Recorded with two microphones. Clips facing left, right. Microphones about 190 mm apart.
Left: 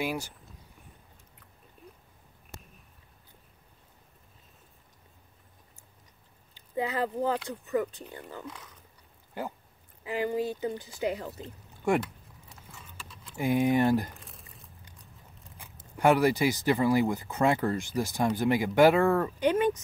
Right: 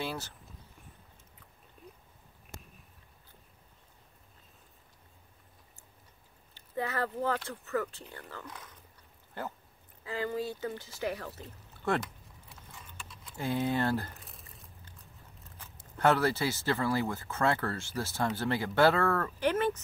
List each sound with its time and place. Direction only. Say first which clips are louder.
0.0 s speech: left 5 dB; 10° left (ahead or behind)
6.5 s speech: left 4 dB; 15° left (ahead or behind)
11.7 s a sound: left 5 dB; 15° left (ahead or behind)
12.7 s clip-clop: left 1 dB; centre (ahead or behind)
13.4 s speech: left 6 dB; 15° left (ahead or behind)
14.1 s crumpling: left 2 dB; centre (ahead or behind)
15.5 s speech: left 3 dB; 15° left (ahead or behind)